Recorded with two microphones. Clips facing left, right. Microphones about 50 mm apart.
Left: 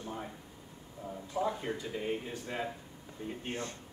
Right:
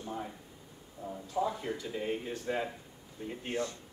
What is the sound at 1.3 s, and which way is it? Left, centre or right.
Speech, left.